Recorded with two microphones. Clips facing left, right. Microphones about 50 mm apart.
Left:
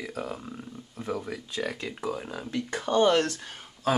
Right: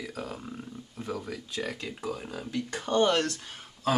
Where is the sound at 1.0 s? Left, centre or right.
Centre.